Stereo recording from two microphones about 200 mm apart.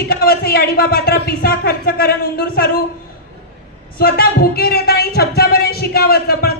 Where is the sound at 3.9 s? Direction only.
50° left (ahead or behind).